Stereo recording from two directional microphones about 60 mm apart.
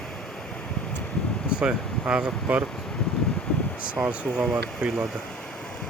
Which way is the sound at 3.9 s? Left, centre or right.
Right.